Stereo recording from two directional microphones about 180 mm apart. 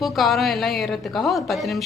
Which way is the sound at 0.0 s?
Centre (ahead or behind).